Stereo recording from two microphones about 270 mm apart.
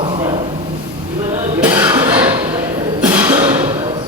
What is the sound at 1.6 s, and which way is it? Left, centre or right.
Music, centre.